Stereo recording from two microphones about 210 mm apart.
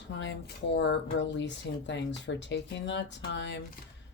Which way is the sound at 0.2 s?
60° left (ahead or behind).